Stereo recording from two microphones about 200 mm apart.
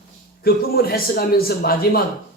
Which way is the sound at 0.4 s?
50° left (ahead or behind).